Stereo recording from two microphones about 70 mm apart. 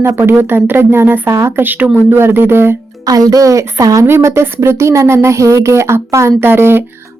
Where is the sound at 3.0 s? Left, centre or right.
Right.